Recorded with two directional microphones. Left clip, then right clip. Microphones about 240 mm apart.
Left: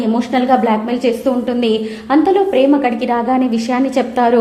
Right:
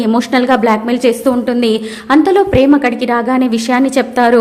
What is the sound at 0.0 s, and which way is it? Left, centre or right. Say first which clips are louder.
A woman's voice: right 3 dB; centre.